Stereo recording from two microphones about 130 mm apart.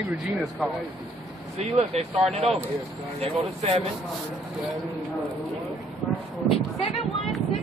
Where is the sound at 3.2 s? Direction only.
50° right (ahead or behind).